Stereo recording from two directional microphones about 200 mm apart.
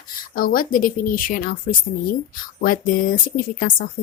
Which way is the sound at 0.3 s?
45° left (ahead or behind).